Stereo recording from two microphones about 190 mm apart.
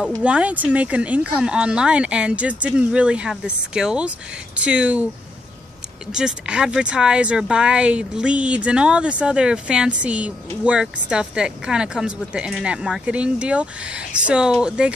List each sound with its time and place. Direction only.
0.2 s speech: 5° right (ahead or behind)
6.1 s speech: 5° right (ahead or behind)